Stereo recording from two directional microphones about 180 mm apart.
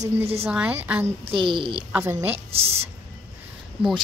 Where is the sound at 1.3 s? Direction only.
25° right (ahead or behind).